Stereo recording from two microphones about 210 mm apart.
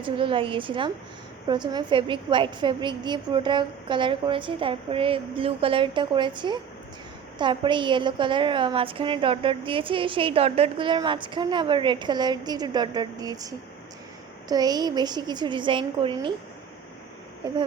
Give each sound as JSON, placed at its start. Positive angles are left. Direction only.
{"t": 0.0, "sound": "a woman's voice", "side_deg": -25}